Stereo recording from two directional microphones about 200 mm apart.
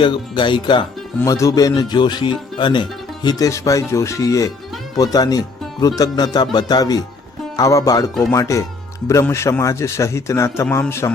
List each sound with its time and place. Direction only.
0.0 s a man's voice: 25° left (ahead or behind)